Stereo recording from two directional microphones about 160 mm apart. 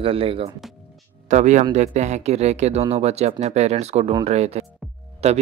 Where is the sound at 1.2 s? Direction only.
50° right (ahead or behind).